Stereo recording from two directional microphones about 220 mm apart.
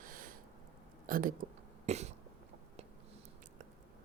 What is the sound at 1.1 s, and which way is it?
Speech, 40° right (ahead or behind).